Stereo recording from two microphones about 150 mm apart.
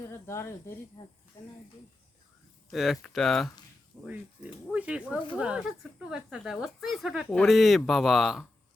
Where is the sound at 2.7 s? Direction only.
Centre (ahead or behind).